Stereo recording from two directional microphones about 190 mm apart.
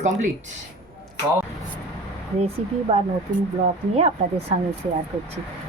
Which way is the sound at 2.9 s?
30° right (ahead or behind).